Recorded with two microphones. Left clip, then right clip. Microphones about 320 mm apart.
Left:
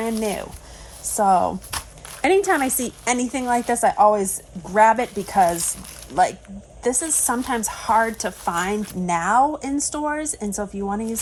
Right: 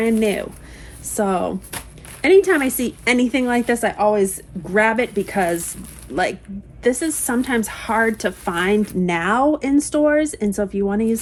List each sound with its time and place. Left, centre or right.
0.0 s a woman's voice: centre
6.8 s a woman's voice: centre